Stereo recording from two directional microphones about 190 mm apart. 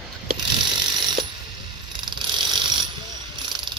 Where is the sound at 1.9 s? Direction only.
25° right (ahead or behind).